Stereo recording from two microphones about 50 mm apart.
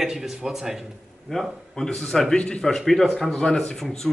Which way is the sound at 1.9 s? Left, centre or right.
Centre.